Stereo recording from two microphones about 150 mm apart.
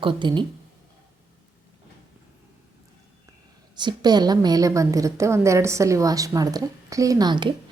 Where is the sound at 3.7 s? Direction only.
30° right (ahead or behind).